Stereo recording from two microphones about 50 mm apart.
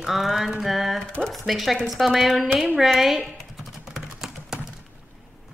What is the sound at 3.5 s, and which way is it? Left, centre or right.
Typing, centre.